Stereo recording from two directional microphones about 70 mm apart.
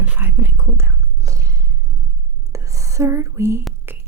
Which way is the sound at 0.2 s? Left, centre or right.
Right.